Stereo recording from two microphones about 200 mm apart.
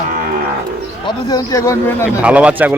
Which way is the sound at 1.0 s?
20° left (ahead or behind).